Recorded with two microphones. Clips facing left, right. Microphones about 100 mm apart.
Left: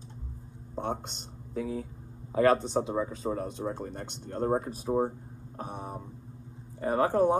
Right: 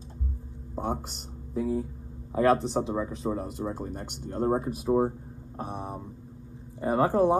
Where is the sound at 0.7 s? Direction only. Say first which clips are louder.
Right 2 dB; 5° right (ahead or behind).